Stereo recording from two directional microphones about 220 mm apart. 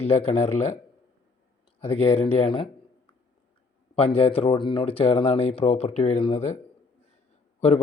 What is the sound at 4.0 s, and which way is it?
Speech, 25° left (ahead or behind).